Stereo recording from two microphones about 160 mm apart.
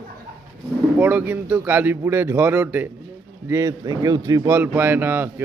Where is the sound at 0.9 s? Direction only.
10° right (ahead or behind).